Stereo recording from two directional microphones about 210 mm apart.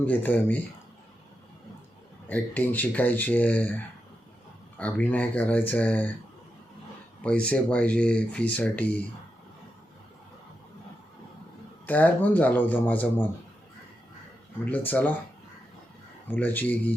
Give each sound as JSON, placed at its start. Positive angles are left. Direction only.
{"t": 0.0, "sound": "speech", "side_deg": 10}
{"t": 2.3, "sound": "speech", "side_deg": 5}
{"t": 7.2, "sound": "speech", "side_deg": 5}
{"t": 11.9, "sound": "speech", "side_deg": 10}
{"t": 14.6, "sound": "speech", "side_deg": 10}
{"t": 16.3, "sound": "speech", "side_deg": 10}